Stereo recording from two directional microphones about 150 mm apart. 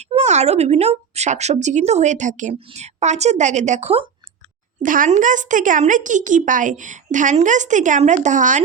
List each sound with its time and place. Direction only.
0.0 s speech: 50° right (ahead or behind)
4.8 s a woman's voice: 60° right (ahead or behind)